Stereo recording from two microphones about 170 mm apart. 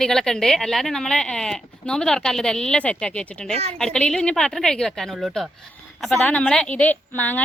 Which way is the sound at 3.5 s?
35° right (ahead or behind).